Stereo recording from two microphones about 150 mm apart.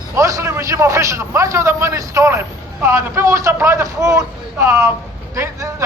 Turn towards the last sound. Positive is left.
turn(degrees=-20)  # may be behind; listen again after turning